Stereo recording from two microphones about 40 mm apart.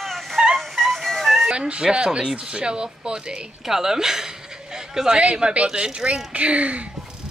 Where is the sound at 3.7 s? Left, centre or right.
Centre.